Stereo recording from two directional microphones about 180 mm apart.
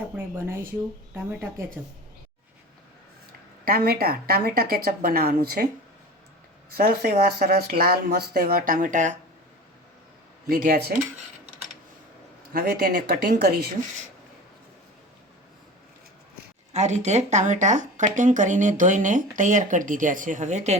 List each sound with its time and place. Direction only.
0.2 s speech: 15° right (ahead or behind)
3.6 s speech: 55° right (ahead or behind)
6.7 s speech: 55° right (ahead or behind)
10.5 s speech: 60° right (ahead or behind)
12.5 s speech: 55° right (ahead or behind)
16.7 s speech: 40° right (ahead or behind)